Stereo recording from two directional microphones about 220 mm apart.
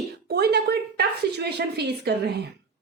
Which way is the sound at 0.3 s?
45° right (ahead or behind).